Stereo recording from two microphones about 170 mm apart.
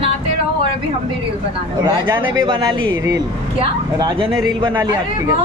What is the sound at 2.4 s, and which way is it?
Speech, 25° right (ahead or behind).